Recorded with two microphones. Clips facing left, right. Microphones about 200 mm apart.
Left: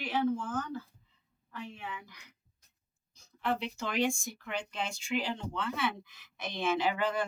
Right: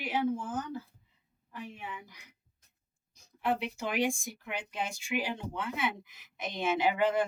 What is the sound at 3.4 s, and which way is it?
Speech, 10° right (ahead or behind).